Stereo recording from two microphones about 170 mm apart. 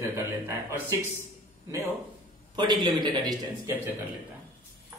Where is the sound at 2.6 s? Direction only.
25° right (ahead or behind).